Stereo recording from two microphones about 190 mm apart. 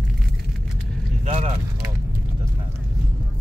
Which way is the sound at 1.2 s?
35° right (ahead or behind).